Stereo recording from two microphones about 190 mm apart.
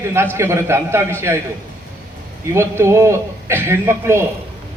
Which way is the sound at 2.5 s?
15° right (ahead or behind).